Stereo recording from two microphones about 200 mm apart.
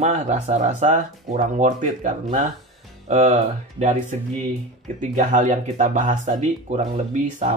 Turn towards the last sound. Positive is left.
turn(degrees=-35)  # may be behind; listen again after turning